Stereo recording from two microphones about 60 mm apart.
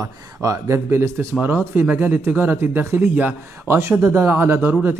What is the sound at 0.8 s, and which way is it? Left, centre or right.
A man's voice, right.